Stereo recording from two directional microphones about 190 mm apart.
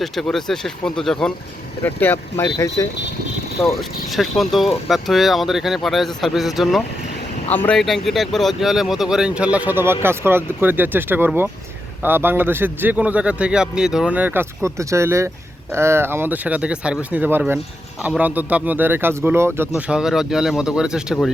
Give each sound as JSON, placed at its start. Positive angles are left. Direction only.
{"t": 0.0, "sound": "speech", "side_deg": 0}
{"t": 3.7, "sound": "a man's voice", "side_deg": 0}